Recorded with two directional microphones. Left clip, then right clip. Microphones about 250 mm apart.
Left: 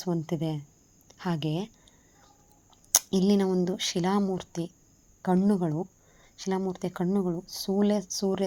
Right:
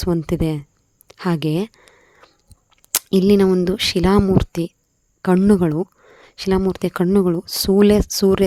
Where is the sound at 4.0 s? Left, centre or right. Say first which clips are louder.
Right 13 dB; right.